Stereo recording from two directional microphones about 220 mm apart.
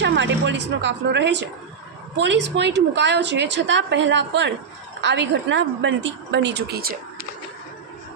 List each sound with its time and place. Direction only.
0.0 s a woman's voice: 55° right (ahead or behind)